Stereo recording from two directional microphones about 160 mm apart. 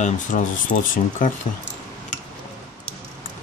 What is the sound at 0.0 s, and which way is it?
Speech, 55° left (ahead or behind).